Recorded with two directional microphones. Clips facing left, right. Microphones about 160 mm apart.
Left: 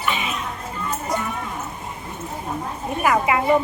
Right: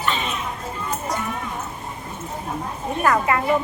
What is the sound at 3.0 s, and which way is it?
Speech, 10° left (ahead or behind).